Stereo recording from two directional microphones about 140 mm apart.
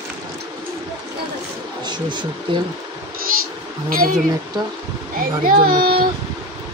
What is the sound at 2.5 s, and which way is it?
Speech, 35° right (ahead or behind).